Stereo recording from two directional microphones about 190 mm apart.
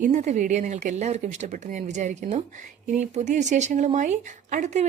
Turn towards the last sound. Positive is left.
turn(degrees=-40)  # may be behind; listen again after turning